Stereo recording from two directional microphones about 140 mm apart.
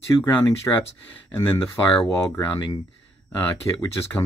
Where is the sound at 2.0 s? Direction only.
15° left (ahead or behind).